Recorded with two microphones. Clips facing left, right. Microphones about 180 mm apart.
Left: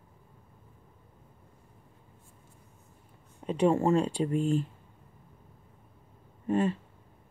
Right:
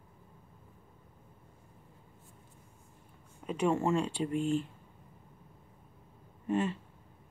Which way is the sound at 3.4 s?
35° left (ahead or behind).